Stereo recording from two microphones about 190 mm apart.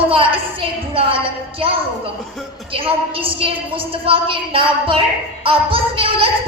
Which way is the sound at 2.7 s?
30° right (ahead or behind).